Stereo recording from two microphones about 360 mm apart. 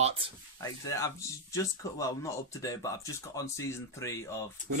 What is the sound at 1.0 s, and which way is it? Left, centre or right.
Speech, centre.